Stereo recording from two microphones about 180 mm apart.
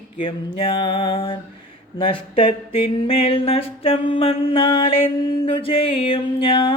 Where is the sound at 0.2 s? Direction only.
30° left (ahead or behind).